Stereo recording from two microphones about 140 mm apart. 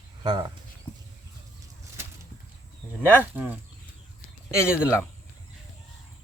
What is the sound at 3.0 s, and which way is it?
Speech, 15° left (ahead or behind).